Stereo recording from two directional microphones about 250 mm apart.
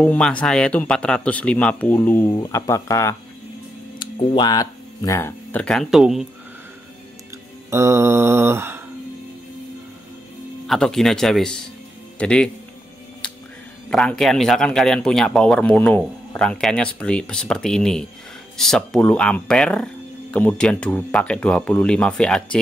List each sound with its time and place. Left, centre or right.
0.0 s a man's voice: centre
7.7 s mantra: centre
10.7 s a man's voice: centre
13.2 s music: centre
13.8 s a man's voice: centre